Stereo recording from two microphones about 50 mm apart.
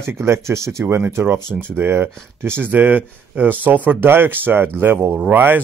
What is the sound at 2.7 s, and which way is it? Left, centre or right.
Speech, right.